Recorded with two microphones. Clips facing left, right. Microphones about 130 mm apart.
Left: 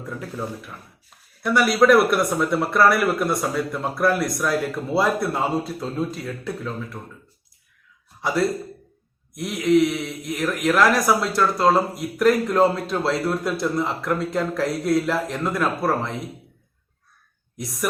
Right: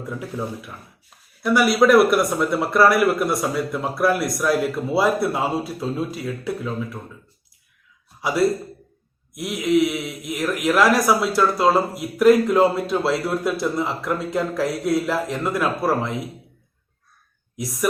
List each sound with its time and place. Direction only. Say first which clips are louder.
0.0 s a man's voice: right 2 dB; 10° right (ahead or behind)
8.2 s a man's voice: right 2 dB; 5° right (ahead or behind)